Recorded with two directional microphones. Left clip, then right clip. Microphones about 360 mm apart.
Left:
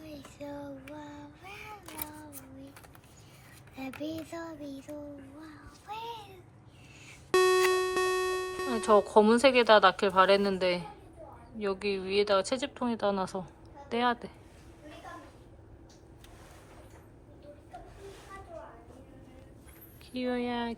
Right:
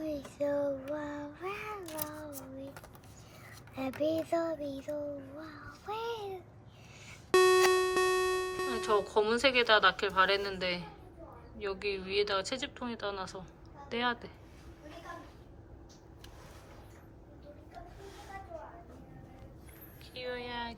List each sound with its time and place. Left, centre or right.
0.0 s child singing: right
1.4 s a sound: right
3.8 s child singing: right
5.5 s a sound: right
7.3 s music: centre
11.6 s a woman's voice: centre
20.2 s speech: centre